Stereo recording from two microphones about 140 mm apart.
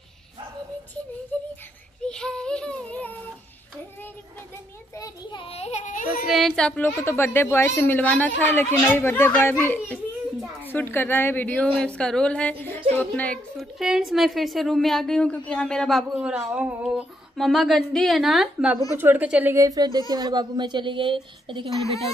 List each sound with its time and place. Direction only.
2.0 s speech: 5° left (ahead or behind)
4.9 s a child's voice: 25° left (ahead or behind)
5.4 s a sound: 45° left (ahead or behind); by 6.2 s 65° left (ahead or behind)
6.2 s a woman's voice: centre (ahead or behind)
16.3 s a woman's voice: 10° right (ahead or behind)
19.5 s a woman's voice: 25° right (ahead or behind)